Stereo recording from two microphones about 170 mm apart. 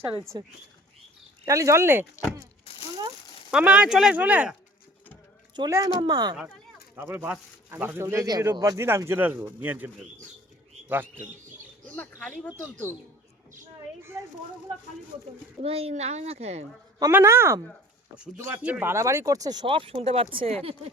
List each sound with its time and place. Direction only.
0.0 s speech: 15° right (ahead or behind)
1.5 s speech: 20° right (ahead or behind)
2.7 s a sound: 35° left (ahead or behind)
3.5 s speech: 5° right (ahead or behind)
5.5 s a man's voice: 20° right (ahead or behind)
11.9 s speech: 5° left (ahead or behind)
15.6 s speech: 35° right (ahead or behind)
17.0 s speech: 15° right (ahead or behind); by 20.9 s 35° right (ahead or behind)